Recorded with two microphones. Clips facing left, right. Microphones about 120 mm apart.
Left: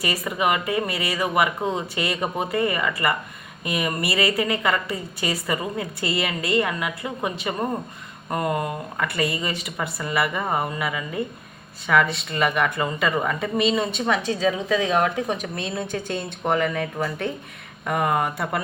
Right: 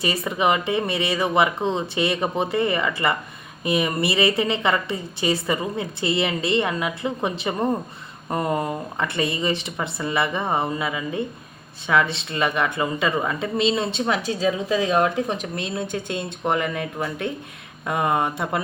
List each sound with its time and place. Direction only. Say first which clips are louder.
0.0 s a woman's voice: right 2 dB; 25° right (ahead or behind)